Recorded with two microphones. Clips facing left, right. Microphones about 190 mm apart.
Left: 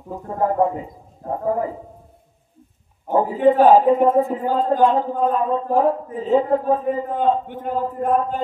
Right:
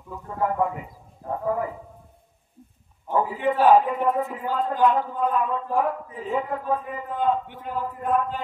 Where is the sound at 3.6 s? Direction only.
30° left (ahead or behind).